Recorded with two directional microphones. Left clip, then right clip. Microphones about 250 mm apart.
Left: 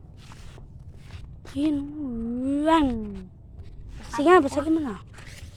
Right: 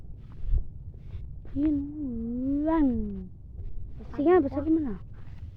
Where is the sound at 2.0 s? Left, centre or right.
Centre.